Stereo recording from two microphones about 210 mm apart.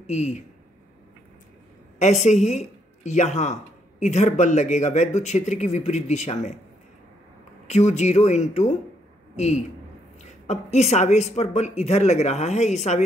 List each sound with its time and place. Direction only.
0.0 s speech: 30° left (ahead or behind)
2.2 s a woman's voice: 35° left (ahead or behind)
7.6 s a woman's voice: 35° left (ahead or behind)